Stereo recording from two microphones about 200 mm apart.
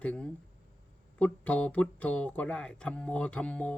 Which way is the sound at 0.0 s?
5° left (ahead or behind).